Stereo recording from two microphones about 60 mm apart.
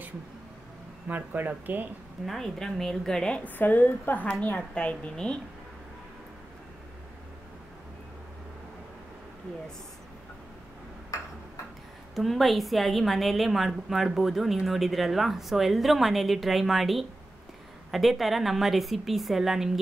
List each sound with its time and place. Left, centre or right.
1.0 s speech: right
2.2 s a woman's voice: centre
3.4 s a woman's voice: left; by 5.4 s centre
12.2 s a woman's voice: centre